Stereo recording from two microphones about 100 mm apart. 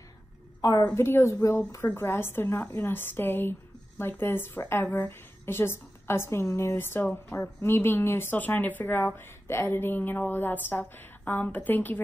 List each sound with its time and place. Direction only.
0.6 s a woman's voice: 45° left (ahead or behind)
0.9 s a woman's voice: 25° left (ahead or behind)